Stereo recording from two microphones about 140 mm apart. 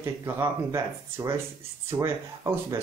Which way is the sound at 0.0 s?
20° right (ahead or behind).